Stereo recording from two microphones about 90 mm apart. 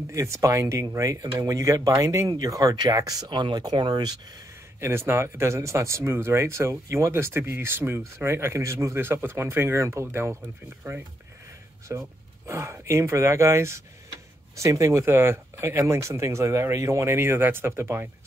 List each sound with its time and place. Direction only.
0.1 s speech: 35° right (ahead or behind)
2.7 s speech: 55° right (ahead or behind)
3.0 s speech: 45° right (ahead or behind)
3.3 s speech: 60° right (ahead or behind)
4.7 s speech: 30° right (ahead or behind)